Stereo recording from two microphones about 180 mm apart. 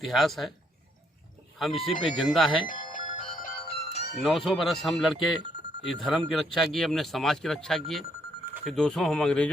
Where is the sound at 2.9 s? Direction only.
50° left (ahead or behind).